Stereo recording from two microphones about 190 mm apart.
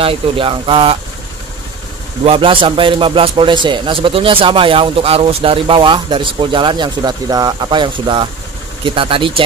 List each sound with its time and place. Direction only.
0.0 s a man's voice: 30° right (ahead or behind)
2.2 s a man's voice: 25° right (ahead or behind)